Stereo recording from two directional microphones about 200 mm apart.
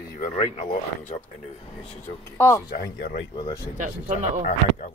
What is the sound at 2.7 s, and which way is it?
Speech, 45° left (ahead or behind).